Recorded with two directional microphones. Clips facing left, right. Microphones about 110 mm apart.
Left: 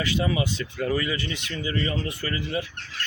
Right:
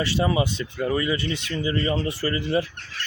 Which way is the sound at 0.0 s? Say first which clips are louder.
Right 3 dB; 30° right (ahead or behind).